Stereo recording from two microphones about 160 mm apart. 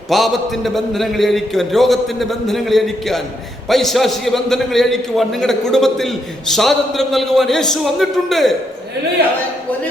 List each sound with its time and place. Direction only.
0.1 s a man's voice: centre (ahead or behind)